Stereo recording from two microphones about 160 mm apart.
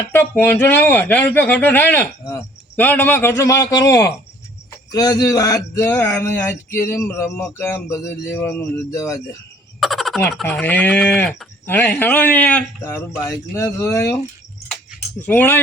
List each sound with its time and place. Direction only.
0.1 s a man's voice: 15° left (ahead or behind)
9.8 s a sound: centre (ahead or behind)
10.4 s a man's voice: 10° left (ahead or behind)
15.3 s a man's voice: 15° left (ahead or behind)